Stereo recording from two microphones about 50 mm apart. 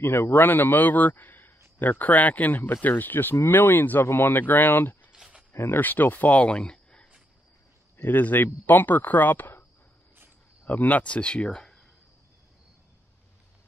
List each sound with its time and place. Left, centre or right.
0.0 s a man's voice: left
0.3 s a man's voice: left
4.0 s speech: left
5.8 s a man's voice: left
6.7 s a sound: centre
8.0 s a man's voice: left
10.6 s speech: left; by 11.8 s centre